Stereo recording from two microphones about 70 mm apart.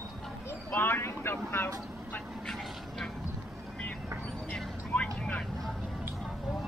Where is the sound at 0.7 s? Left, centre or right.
Left.